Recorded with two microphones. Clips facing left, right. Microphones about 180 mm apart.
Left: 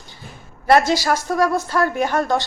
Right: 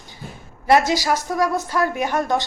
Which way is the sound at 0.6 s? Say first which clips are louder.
Left 1 dB; 15° right (ahead or behind).